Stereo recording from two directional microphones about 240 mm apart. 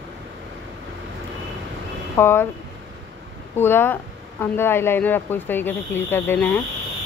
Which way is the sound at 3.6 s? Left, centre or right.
Centre.